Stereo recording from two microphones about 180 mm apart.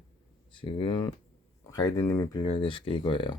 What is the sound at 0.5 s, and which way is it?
Speech, 30° left (ahead or behind).